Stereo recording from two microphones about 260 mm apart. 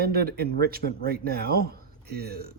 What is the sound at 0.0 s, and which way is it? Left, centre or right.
Speech, right.